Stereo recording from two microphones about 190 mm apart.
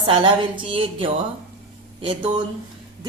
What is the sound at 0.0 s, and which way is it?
A woman's voice, 25° right (ahead or behind).